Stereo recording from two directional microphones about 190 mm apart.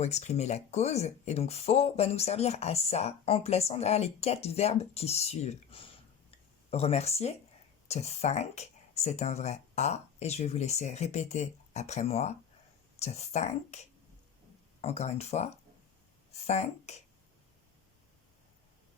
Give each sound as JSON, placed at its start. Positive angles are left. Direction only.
{"t": 0.0, "sound": "speech", "side_deg": 35}
{"t": 16.5, "sound": "speech", "side_deg": 35}